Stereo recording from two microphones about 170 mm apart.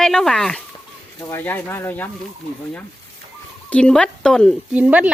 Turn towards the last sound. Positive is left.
turn(degrees=-10)  # may be behind; listen again after turning